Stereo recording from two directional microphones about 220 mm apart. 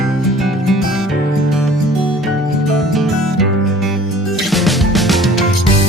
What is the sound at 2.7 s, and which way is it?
Music, centre (ahead or behind).